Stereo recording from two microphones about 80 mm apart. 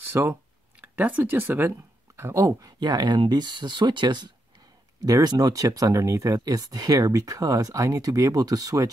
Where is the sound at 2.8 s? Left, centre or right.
Right.